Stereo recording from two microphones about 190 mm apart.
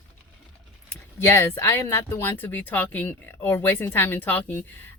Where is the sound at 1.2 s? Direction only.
15° left (ahead or behind).